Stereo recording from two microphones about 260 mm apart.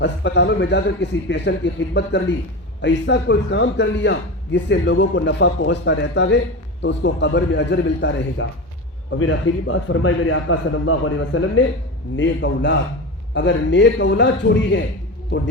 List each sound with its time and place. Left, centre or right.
0.0 s a man's voice: left